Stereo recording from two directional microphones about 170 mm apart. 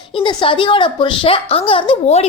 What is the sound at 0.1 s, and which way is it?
A woman's voice, 25° left (ahead or behind).